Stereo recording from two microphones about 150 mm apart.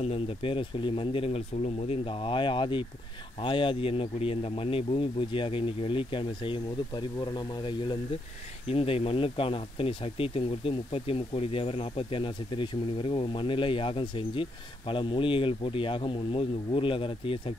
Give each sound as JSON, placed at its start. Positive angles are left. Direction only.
{"t": 0.0, "sound": "speech", "side_deg": 40}